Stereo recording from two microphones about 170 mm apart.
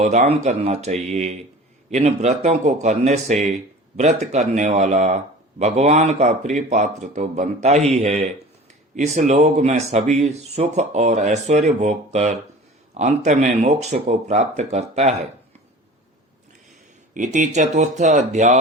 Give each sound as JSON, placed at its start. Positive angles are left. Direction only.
{"t": 0.0, "sound": "speech", "side_deg": -45}
{"t": 17.2, "sound": "speech", "side_deg": -45}